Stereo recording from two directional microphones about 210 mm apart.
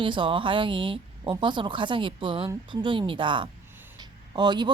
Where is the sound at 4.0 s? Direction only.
20° right (ahead or behind).